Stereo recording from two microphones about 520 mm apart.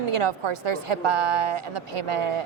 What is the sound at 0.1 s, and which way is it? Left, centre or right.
A woman's voice, right.